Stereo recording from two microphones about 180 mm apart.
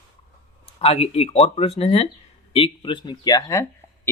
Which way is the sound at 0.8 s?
35° left (ahead or behind).